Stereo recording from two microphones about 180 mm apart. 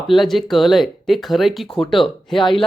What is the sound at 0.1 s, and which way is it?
Speech, centre (ahead or behind).